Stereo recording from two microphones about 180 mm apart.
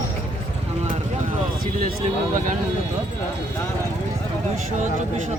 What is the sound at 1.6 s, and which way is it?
Speech, 55° right (ahead or behind).